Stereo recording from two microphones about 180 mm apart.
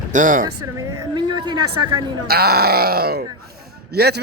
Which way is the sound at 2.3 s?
60° right (ahead or behind).